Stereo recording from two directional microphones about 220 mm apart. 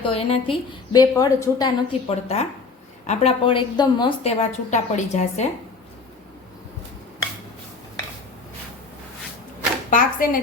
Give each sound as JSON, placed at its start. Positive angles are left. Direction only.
{"t": 0.0, "sound": "a woman's voice", "side_deg": 25}
{"t": 0.9, "sound": "a woman's voice", "side_deg": 15}
{"t": 9.9, "sound": "speech", "side_deg": 40}